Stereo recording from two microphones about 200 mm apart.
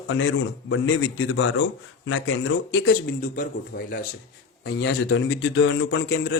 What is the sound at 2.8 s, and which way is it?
Speech, 45° left (ahead or behind).